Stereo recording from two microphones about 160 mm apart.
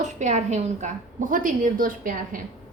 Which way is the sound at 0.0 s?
50° right (ahead or behind).